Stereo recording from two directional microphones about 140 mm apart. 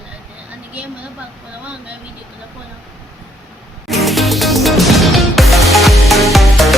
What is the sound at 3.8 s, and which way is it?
Music, centre (ahead or behind).